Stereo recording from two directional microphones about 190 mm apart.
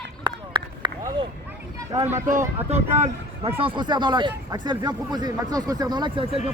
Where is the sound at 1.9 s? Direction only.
35° right (ahead or behind).